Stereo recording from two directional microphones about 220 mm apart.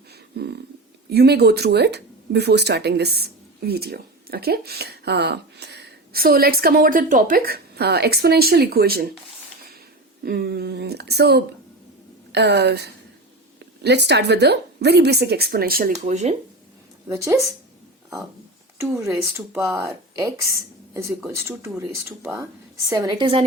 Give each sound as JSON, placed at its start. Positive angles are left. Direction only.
{"t": 0.4, "sound": "speech", "side_deg": -50}
{"t": 10.2, "sound": "speech", "side_deg": -45}
{"t": 17.1, "sound": "speech", "side_deg": -15}
{"t": 18.8, "sound": "a woman's voice", "side_deg": -10}